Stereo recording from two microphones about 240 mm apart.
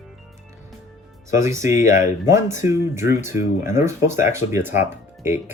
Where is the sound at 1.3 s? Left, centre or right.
Centre.